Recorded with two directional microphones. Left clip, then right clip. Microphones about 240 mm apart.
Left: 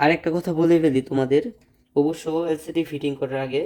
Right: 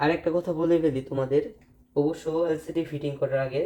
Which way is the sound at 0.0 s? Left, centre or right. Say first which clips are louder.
Left 4 dB; left.